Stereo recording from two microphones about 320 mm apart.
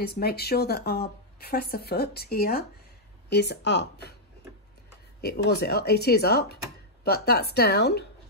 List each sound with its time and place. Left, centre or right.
0.0 s speech: left
5.2 s speech: left